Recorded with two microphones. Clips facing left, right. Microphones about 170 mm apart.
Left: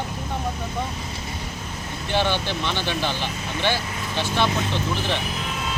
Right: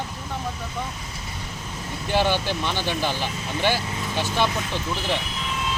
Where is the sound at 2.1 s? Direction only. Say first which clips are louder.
Right 1 dB; 10° right (ahead or behind).